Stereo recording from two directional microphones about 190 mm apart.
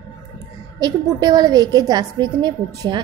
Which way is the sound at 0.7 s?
20° right (ahead or behind).